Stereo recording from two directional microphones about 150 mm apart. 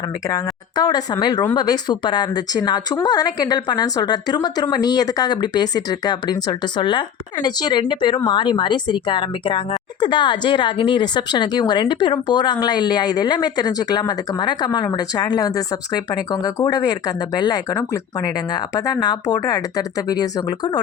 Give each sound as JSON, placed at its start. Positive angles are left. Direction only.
{"t": 0.3, "sound": "speech", "side_deg": 25}